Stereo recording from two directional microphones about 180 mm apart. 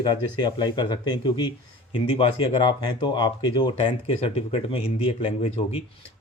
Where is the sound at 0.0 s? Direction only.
25° left (ahead or behind).